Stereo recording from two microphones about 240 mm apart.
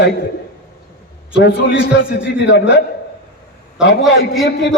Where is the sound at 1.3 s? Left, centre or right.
Left.